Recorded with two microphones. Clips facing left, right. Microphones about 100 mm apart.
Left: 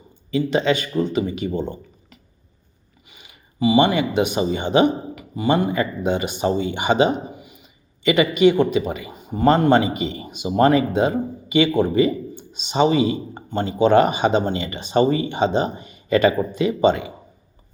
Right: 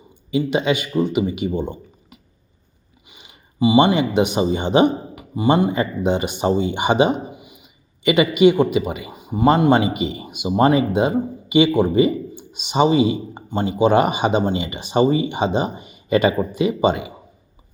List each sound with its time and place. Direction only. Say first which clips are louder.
0.3 s speech: even; 15° right (ahead or behind)